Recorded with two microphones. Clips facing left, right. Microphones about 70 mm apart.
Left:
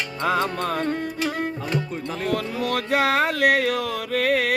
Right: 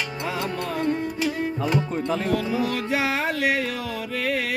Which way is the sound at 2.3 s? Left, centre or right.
Left.